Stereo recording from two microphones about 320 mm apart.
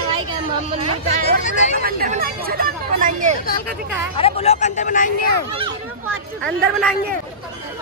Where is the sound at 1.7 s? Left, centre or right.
Right.